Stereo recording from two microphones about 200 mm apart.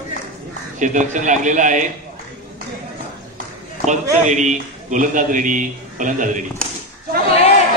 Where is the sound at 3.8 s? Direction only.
35° right (ahead or behind).